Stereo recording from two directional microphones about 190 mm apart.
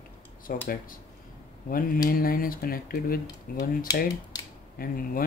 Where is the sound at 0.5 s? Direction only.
50° left (ahead or behind).